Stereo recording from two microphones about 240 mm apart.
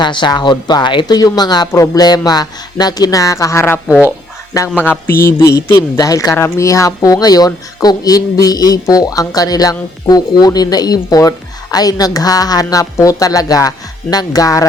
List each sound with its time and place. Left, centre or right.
0.0 s speech: centre
3.8 s speech: centre
4.5 s speech: centre